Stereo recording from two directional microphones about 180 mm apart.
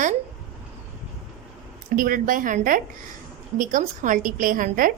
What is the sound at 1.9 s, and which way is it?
A woman's voice, 50° right (ahead or behind).